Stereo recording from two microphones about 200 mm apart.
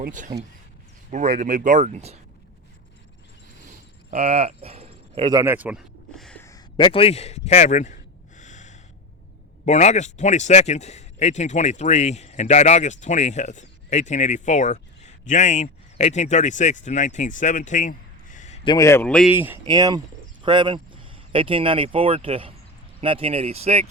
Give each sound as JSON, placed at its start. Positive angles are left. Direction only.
{"t": 0.0, "sound": "speech", "side_deg": -40}
{"t": 3.7, "sound": "a sound", "side_deg": -35}
{"t": 6.4, "sound": "a man's voice", "side_deg": 20}
{"t": 8.4, "sound": "snort", "side_deg": 40}
{"t": 9.6, "sound": "speech", "side_deg": 35}
{"t": 18.7, "sound": "a man's voice", "side_deg": 15}
{"t": 19.3, "sound": "speech", "side_deg": -10}